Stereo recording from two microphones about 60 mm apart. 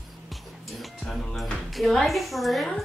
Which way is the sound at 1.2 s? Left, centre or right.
Centre.